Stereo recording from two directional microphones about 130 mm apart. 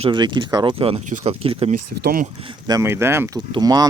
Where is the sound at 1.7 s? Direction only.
90° right.